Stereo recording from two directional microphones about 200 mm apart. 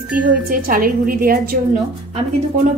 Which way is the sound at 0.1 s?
45° right (ahead or behind).